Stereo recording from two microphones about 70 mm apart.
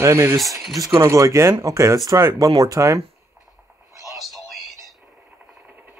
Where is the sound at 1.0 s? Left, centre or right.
Right.